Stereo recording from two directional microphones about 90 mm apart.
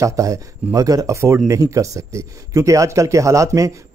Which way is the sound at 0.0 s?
35° right (ahead or behind).